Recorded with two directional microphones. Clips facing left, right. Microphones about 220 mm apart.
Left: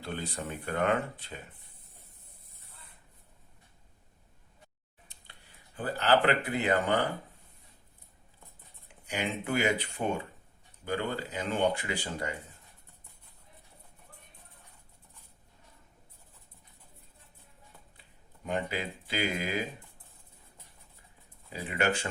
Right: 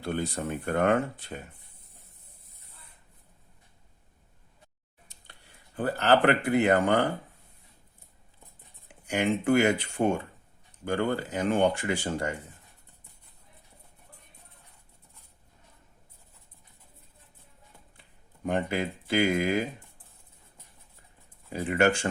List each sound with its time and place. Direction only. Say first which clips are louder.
0.0 s speech: right 6 dB; 45° right (ahead or behind)
5.0 s speech: right 2 dB; 45° right (ahead or behind)
9.0 s speech: right 8 dB; 50° right (ahead or behind)
18.4 s speech: right 5 dB; 50° right (ahead or behind)
21.5 s speech: right 6 dB; 50° right (ahead or behind)